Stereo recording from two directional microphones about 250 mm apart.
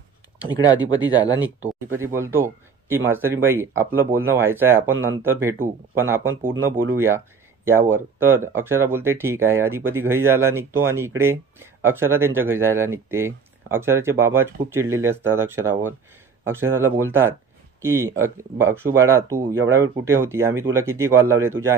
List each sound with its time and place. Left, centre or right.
0.5 s speech: centre
2.1 s speech: centre